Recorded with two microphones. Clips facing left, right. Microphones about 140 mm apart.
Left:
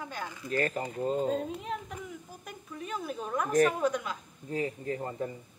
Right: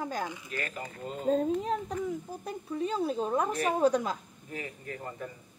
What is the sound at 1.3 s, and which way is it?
Speech, 35° right (ahead or behind).